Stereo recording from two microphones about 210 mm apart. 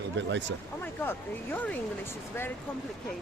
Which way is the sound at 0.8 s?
10° left (ahead or behind).